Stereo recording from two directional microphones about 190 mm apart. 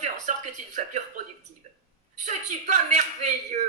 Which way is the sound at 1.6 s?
40° right (ahead or behind).